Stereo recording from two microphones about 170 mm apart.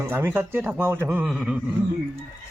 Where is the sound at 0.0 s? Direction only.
15° right (ahead or behind).